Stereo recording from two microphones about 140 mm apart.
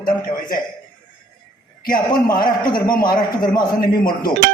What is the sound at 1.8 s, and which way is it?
A man's voice, 90° left.